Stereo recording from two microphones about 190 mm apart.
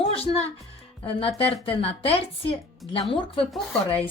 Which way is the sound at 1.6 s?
30° left (ahead or behind).